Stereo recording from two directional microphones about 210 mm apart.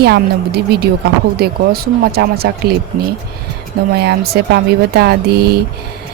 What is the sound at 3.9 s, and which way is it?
Speech, 50° right (ahead or behind).